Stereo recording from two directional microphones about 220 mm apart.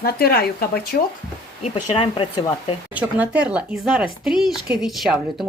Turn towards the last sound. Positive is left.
turn(degrees=0)  # may be behind; listen again after turning